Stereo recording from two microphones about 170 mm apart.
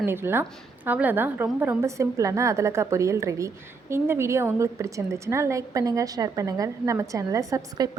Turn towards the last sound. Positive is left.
turn(degrees=-20)  # may be behind; listen again after turning